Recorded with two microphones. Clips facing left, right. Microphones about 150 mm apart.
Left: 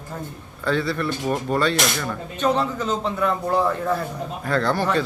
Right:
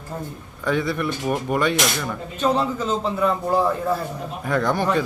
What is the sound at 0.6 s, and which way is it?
A man's voice, 15° right (ahead or behind).